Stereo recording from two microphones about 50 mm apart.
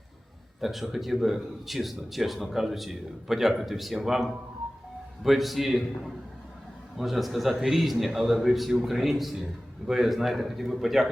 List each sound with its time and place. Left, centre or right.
0.6 s speech: centre
6.9 s speech: centre
8.7 s speech: centre
9.0 s speech: centre